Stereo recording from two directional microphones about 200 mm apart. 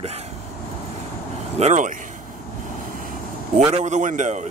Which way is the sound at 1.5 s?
35° right (ahead or behind).